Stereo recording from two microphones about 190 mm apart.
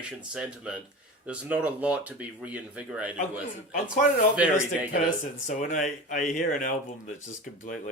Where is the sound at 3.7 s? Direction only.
45° left (ahead or behind).